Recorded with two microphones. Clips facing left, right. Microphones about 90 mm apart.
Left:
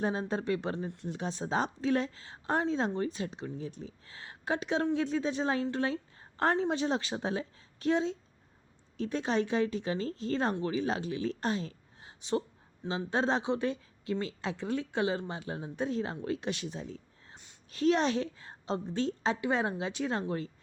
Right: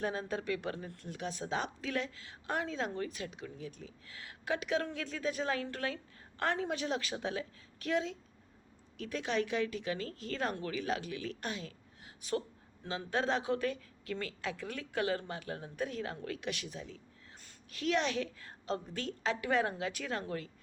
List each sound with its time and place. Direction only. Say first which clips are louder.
0.0 s a woman's voice: left 4 dB; 30° left (ahead or behind)